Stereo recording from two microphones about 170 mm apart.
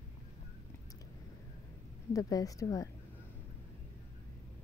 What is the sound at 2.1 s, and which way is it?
Speech, 20° left (ahead or behind).